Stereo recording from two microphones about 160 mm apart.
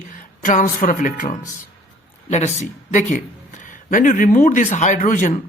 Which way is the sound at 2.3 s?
45° left (ahead or behind).